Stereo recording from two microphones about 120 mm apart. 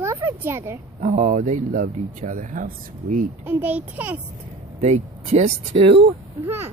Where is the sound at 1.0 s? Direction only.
85° right.